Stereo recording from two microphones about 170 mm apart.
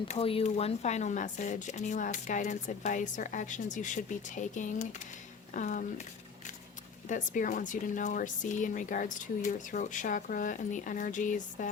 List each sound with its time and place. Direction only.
0.1 s speech: 35° left (ahead or behind)
7.1 s speech: 50° left (ahead or behind)